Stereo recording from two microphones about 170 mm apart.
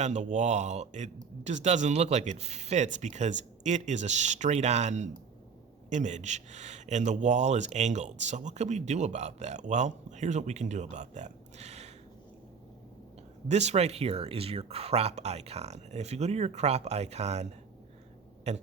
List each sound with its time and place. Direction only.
0.0 s a man's voice: 45° right (ahead or behind)
13.5 s speech: 40° right (ahead or behind)